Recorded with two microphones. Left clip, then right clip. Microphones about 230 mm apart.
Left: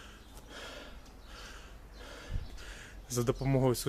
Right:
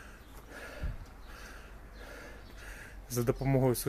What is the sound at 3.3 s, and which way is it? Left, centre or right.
Speech, centre.